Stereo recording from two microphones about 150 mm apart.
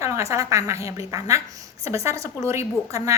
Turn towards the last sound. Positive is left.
turn(degrees=-20)  # may be behind; listen again after turning